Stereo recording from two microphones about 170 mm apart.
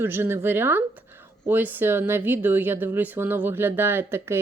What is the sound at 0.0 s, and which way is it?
Speech, 15° right (ahead or behind).